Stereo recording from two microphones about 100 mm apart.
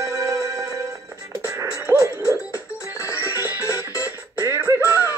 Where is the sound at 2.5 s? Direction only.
30° left (ahead or behind).